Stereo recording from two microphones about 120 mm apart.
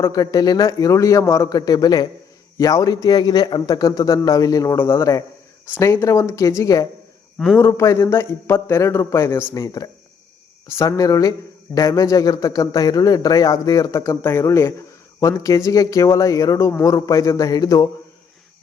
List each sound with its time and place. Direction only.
0.0 s a man's voice: 30° left (ahead or behind)
7.3 s a man's voice: centre (ahead or behind)
7.6 s a man's voice: 25° left (ahead or behind)